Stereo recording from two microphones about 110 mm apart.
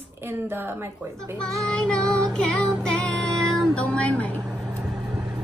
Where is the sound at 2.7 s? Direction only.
5° left (ahead or behind).